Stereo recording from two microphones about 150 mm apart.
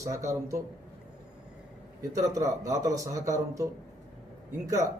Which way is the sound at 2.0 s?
20° right (ahead or behind).